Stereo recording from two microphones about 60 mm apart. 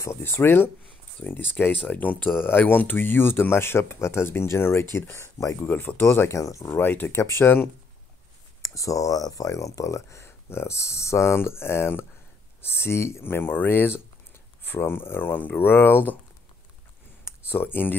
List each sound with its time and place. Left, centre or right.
0.0 s speech: left
5.4 s speech: left
5.7 s speech: left
6.3 s speech: left
6.7 s speech: left
7.2 s speech: left
8.6 s speech: left
17.2 s a sound: left